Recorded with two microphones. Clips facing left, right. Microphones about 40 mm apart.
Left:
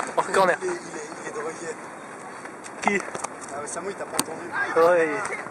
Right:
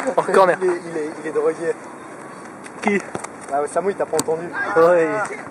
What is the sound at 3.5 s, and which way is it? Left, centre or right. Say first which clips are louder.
Speech: right 15 dB; centre.